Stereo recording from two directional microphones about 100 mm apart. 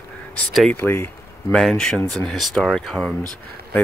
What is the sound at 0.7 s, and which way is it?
Speech, 25° left (ahead or behind).